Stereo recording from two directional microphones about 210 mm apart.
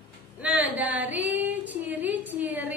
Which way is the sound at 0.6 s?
5° right (ahead or behind).